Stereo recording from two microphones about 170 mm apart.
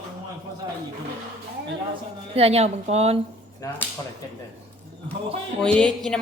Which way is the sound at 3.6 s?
20° left (ahead or behind).